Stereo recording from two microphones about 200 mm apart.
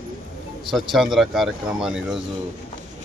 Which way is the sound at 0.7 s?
Centre (ahead or behind).